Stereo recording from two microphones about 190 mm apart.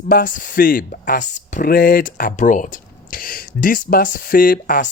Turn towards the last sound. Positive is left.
turn(degrees=45)  # may be behind; listen again after turning